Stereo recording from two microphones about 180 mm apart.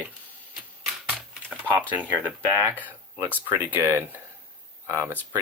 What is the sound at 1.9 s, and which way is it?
Speech, 10° right (ahead or behind).